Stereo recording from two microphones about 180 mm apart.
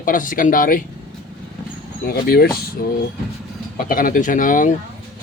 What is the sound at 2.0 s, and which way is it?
Speech, 60° left (ahead or behind).